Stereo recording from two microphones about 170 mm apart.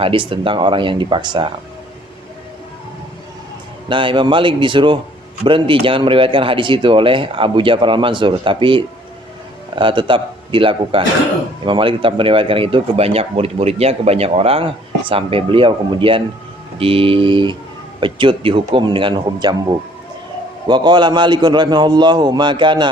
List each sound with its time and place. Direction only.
0.0 s a man's voice: 30° right (ahead or behind)
3.8 s a man's voice: 30° right (ahead or behind)
20.7 s a man's voice: 25° right (ahead or behind)